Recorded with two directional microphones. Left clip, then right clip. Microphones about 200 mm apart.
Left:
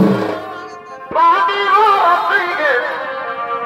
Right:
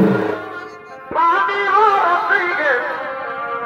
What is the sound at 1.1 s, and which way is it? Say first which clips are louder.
Music: left 3 dB; 15° left (ahead or behind).